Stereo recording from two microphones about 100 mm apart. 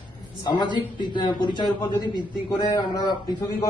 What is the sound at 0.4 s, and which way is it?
A man's voice, 45° left (ahead or behind).